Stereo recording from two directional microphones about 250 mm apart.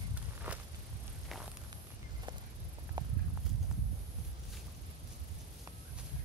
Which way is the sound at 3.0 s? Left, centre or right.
Centre.